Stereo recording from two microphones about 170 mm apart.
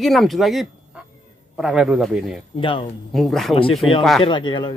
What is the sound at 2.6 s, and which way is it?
Speech, 30° left (ahead or behind).